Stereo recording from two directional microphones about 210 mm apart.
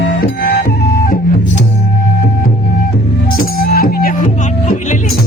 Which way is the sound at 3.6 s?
45° left (ahead or behind).